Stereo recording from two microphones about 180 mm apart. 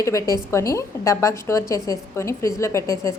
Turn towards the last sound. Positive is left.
turn(degrees=15)  # may be behind; listen again after turning